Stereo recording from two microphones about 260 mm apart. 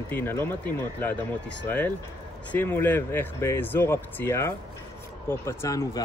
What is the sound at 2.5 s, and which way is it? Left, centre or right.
Speech, centre.